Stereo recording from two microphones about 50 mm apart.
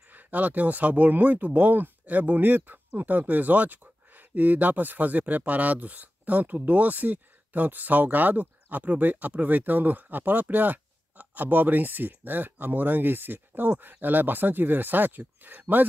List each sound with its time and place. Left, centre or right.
0.1 s speech: right